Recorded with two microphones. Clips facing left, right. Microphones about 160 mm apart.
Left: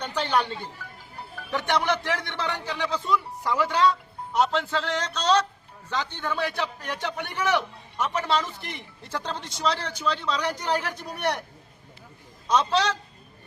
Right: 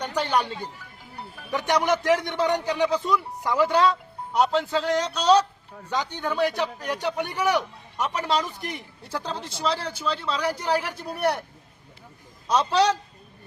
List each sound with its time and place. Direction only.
0.0 s a man's voice: 10° right (ahead or behind)
12.5 s a man's voice: 10° right (ahead or behind)